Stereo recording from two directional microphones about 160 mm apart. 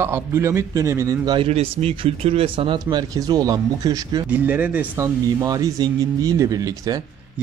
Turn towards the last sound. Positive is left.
turn(degrees=-20)  # may be behind; listen again after turning